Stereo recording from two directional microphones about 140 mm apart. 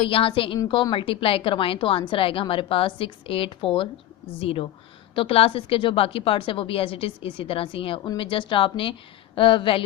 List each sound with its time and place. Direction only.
0.0 s a woman's voice: 40° left (ahead or behind)